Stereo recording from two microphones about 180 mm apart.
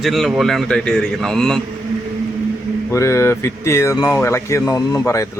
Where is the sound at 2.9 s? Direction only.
15° left (ahead or behind).